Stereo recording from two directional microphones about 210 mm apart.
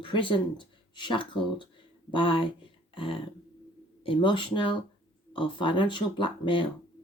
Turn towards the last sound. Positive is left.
turn(degrees=25)  # may be behind; listen again after turning